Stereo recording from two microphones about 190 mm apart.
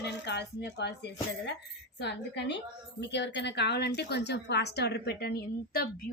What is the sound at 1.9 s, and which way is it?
A woman's voice, 65° left (ahead or behind).